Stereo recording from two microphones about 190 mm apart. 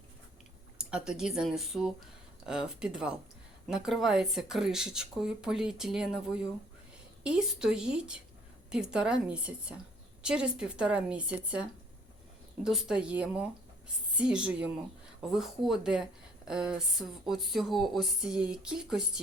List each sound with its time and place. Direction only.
0.8 s speech: 5° right (ahead or behind)
12.6 s a woman's voice: 5° right (ahead or behind)